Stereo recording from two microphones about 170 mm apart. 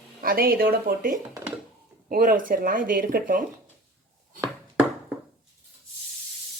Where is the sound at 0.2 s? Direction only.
60° right (ahead or behind).